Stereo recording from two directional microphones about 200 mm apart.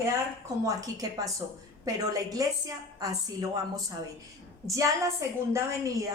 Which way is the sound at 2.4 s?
15° right (ahead or behind).